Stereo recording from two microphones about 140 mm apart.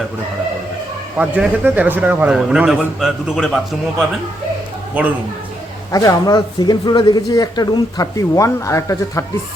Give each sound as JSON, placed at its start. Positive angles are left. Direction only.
{"t": 1.2, "sound": "a man's voice", "side_deg": -10}
{"t": 5.9, "sound": "speech", "side_deg": 25}